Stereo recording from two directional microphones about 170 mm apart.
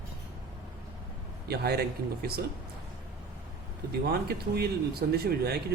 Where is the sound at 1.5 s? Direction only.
70° right (ahead or behind).